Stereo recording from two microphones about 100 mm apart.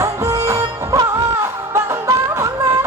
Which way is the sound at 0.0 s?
35° right (ahead or behind).